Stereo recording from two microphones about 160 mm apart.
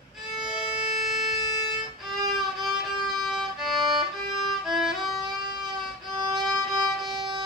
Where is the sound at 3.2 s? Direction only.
Centre (ahead or behind).